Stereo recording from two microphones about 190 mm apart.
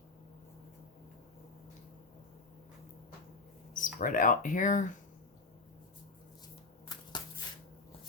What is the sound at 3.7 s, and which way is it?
Speech, 45° left (ahead or behind).